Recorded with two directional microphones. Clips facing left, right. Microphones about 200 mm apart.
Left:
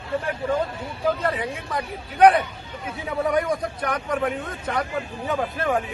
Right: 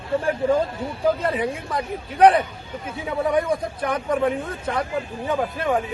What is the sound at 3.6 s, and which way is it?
Speech, 25° right (ahead or behind).